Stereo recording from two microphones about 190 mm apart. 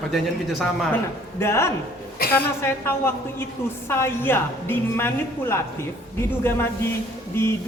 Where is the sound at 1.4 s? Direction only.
15° left (ahead or behind).